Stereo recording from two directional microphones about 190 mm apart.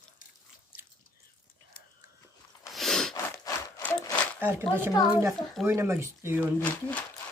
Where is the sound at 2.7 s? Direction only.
Centre (ahead or behind).